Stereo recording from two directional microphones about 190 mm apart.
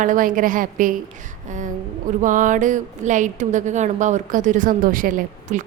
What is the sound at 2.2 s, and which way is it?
A woman's voice, 45° right (ahead or behind).